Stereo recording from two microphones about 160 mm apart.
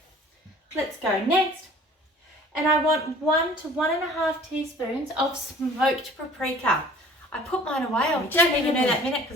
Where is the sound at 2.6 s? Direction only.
20° left (ahead or behind).